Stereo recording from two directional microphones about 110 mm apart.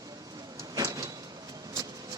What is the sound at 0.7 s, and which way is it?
Sliding door, 35° right (ahead or behind).